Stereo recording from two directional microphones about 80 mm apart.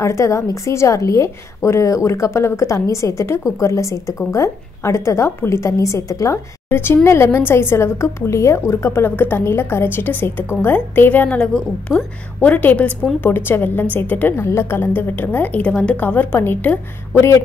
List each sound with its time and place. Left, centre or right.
0.0 s a woman's voice: left; by 12.1 s centre
12.4 s a woman's voice: left
14.3 s a woman's voice: left